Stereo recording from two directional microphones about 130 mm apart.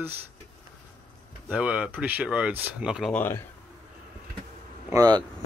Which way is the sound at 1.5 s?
10° right (ahead or behind).